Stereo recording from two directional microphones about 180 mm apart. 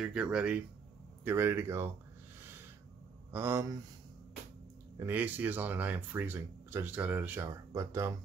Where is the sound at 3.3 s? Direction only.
15° right (ahead or behind).